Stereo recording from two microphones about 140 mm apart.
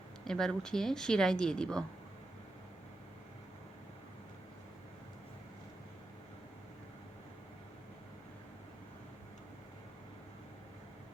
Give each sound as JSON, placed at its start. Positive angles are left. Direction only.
{"t": 0.3, "sound": "a woman's voice", "side_deg": 5}